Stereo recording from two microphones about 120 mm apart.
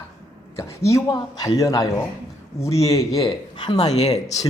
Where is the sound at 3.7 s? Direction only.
65° left (ahead or behind).